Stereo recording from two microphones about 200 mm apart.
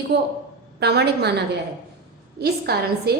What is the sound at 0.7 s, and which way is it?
A woman's voice, 55° right (ahead or behind).